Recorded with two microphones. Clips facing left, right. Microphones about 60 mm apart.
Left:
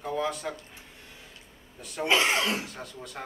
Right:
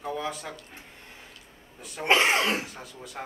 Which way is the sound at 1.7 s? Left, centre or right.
Centre.